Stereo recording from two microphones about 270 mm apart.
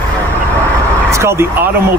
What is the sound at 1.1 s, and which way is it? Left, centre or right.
Speech, centre.